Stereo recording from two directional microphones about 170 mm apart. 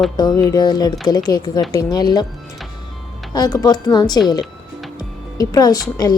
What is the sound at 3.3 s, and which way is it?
Speech, 25° left (ahead or behind).